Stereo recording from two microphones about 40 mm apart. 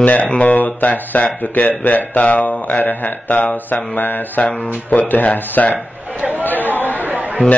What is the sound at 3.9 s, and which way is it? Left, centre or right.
Speech, left.